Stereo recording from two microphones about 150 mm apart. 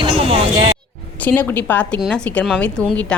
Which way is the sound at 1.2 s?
10° left (ahead or behind).